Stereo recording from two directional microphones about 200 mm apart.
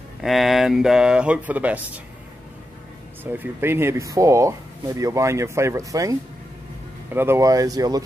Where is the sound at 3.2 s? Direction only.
10° right (ahead or behind).